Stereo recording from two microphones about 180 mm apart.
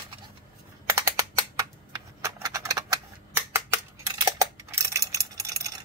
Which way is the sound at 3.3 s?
15° right (ahead or behind).